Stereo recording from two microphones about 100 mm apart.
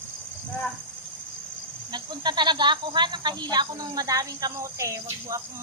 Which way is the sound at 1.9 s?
50° right (ahead or behind).